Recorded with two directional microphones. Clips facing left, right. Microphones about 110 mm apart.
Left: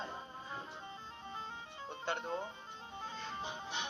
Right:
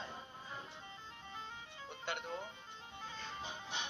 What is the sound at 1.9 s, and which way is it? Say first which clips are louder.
Speech: left 4 dB; 35° left (ahead or behind).